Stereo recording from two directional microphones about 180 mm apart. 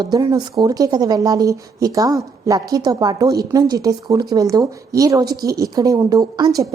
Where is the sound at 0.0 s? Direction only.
20° right (ahead or behind).